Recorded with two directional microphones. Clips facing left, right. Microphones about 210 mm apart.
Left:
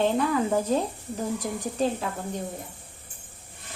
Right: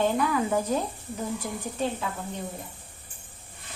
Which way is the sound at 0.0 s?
30° left (ahead or behind).